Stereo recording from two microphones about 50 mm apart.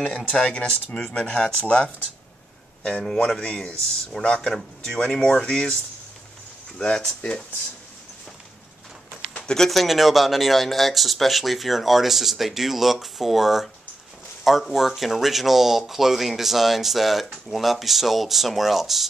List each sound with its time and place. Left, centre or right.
0.0 s speech: left
6.8 s speech: centre
9.7 s speech: centre